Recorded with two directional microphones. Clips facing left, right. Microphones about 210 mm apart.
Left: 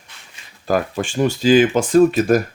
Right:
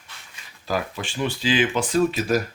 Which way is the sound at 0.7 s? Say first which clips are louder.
Left 7 dB; 45° left (ahead or behind).